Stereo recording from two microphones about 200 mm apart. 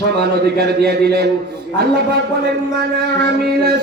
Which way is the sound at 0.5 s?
55° right (ahead or behind).